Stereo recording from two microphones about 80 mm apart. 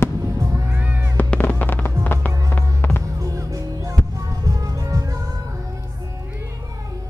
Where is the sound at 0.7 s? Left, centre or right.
Right.